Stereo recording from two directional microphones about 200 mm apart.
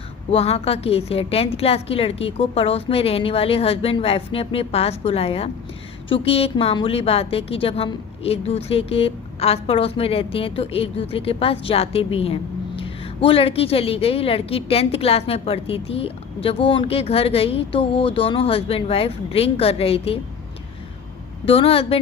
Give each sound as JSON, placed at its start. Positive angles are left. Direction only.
{"t": 0.3, "sound": "a woman's voice", "side_deg": 30}
{"t": 21.4, "sound": "a woman's voice", "side_deg": 30}